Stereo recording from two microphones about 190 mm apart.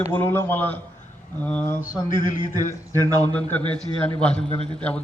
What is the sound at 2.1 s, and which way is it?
A man's voice, 25° right (ahead or behind).